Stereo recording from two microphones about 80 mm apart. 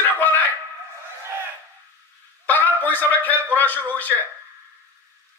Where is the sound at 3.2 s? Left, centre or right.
Left.